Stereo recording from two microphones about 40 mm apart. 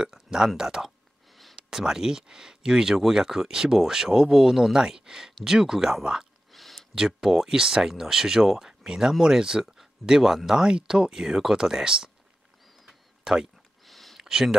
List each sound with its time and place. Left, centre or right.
0.0 s speech: centre
6.5 s a sound: centre
7.0 s speech: centre
13.2 s speech: centre
13.8 s a sound: centre
14.2 s speech: centre